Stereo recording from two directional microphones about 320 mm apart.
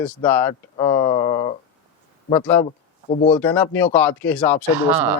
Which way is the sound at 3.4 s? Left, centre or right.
Centre.